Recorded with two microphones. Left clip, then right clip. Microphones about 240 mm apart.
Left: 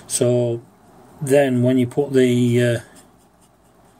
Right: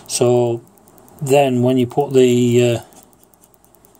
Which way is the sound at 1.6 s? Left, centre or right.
Centre.